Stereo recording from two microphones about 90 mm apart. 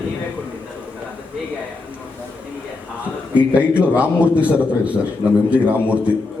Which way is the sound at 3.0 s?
15° right (ahead or behind).